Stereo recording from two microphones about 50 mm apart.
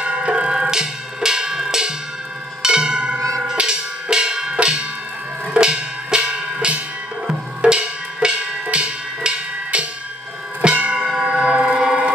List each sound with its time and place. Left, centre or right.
0.0 s music: right
2.6 s tubular bells: centre
3.5 s music: centre
7.6 s percussion: centre
10.6 s church bell: right
11.0 s church bell: centre
11.2 s a sound: right